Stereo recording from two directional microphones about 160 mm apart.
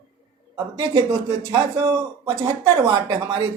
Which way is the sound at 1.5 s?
25° right (ahead or behind).